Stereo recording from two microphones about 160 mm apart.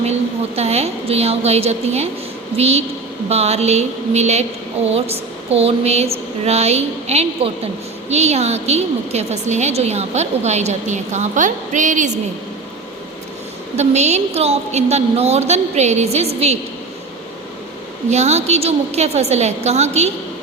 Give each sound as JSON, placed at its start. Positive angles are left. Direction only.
{"t": 0.0, "sound": "a woman's voice", "side_deg": -40}
{"t": 13.7, "sound": "a woman's voice", "side_deg": -45}
{"t": 18.1, "sound": "a woman's voice", "side_deg": -45}